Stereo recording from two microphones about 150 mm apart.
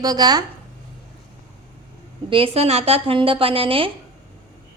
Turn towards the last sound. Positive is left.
turn(degrees=-35)  # may be behind; listen again after turning